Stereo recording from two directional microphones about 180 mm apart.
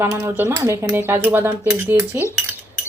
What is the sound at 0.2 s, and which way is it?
Speech, 15° right (ahead or behind).